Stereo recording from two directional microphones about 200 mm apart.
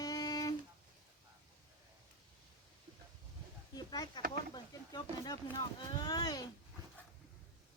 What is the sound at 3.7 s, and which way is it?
Speech, 20° left (ahead or behind).